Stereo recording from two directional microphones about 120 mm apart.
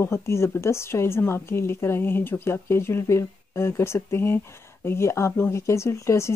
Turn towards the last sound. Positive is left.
turn(degrees=25)  # may be behind; listen again after turning